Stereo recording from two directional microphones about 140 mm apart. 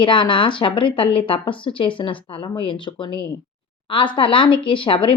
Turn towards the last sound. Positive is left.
turn(degrees=40)  # may be behind; listen again after turning